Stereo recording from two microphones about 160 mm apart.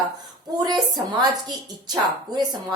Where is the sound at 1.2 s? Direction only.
25° right (ahead or behind).